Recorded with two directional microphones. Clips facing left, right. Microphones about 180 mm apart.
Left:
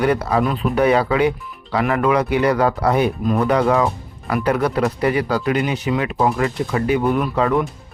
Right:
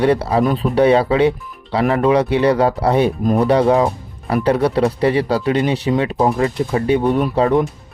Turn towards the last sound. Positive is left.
turn(degrees=-30)  # may be behind; listen again after turning